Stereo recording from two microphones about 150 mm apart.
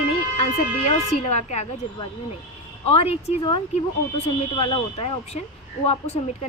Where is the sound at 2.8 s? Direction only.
40° left (ahead or behind).